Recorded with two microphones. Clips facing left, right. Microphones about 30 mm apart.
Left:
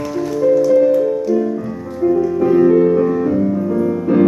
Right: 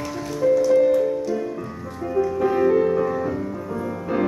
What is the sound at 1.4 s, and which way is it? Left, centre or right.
Music, centre.